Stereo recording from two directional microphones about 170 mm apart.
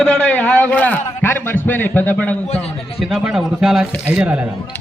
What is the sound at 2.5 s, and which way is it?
Speech, 40° left (ahead or behind).